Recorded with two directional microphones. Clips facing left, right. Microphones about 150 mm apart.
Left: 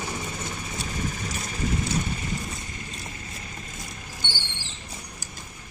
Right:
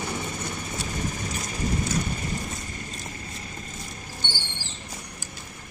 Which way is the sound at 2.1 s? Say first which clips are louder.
Even; 45° right (ahead or behind).